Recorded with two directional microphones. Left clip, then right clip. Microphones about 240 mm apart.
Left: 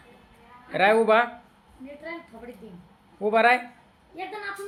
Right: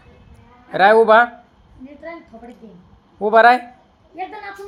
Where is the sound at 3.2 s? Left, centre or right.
Right.